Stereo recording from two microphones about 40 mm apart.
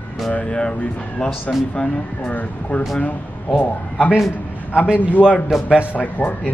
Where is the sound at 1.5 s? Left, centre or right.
Centre.